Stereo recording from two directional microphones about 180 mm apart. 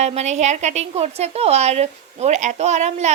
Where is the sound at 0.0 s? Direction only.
40° right (ahead or behind).